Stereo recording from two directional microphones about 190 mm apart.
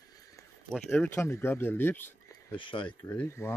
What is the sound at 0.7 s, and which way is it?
Speech, 5° left (ahead or behind).